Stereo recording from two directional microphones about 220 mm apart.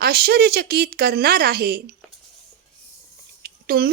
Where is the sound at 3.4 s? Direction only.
45° right (ahead or behind).